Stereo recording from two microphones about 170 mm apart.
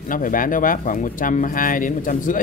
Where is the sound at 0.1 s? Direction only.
55° left (ahead or behind).